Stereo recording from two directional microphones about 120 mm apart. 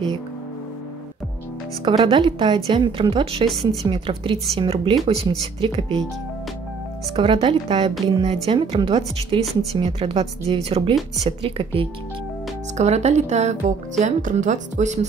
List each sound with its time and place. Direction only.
1.9 s a woman's voice: 45° right (ahead or behind)
7.2 s a woman's voice: 45° right (ahead or behind)
9.4 s speech: centre (ahead or behind)
9.8 s a woman's voice: 55° right (ahead or behind)
12.7 s speech: 70° right (ahead or behind); by 15.0 s 90° right